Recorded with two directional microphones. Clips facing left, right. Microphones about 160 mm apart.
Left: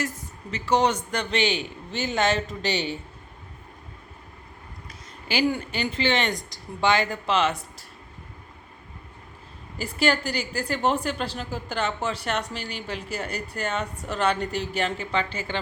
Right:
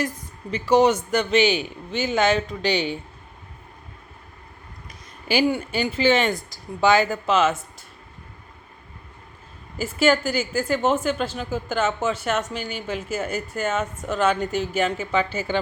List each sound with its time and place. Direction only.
0.6 s a woman's voice: 10° right (ahead or behind)
5.5 s a woman's voice: 5° right (ahead or behind)
9.7 s a woman's voice: centre (ahead or behind)